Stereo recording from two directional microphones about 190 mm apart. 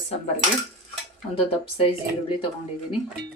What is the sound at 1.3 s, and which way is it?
Speech, 30° left (ahead or behind).